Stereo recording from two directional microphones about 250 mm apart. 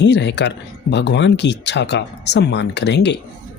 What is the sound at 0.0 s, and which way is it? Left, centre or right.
Speech, left.